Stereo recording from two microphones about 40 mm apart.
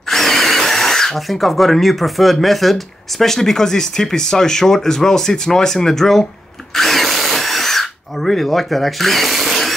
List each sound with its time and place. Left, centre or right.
0.1 s speech: centre
6.7 s drill: centre